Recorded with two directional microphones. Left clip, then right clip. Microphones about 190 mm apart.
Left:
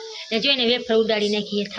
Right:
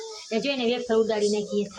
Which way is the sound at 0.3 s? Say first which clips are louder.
Left 6 dB; 5° left (ahead or behind).